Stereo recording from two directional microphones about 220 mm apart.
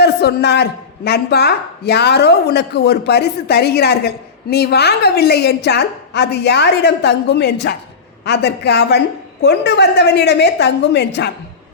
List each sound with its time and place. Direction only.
0.0 s a woman's voice: 50° left (ahead or behind)